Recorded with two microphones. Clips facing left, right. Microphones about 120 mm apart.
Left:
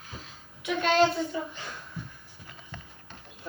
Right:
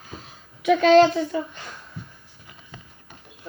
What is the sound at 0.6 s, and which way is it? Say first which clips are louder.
Speech: right 9 dB; 90° right.